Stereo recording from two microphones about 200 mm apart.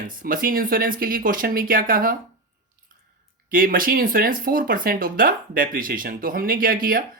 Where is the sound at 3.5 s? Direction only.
45° right (ahead or behind).